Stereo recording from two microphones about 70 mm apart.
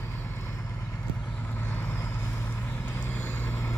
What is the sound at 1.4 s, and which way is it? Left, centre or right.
Vehicle, left.